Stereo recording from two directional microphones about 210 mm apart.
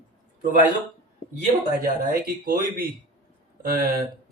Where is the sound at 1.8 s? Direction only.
40° right (ahead or behind).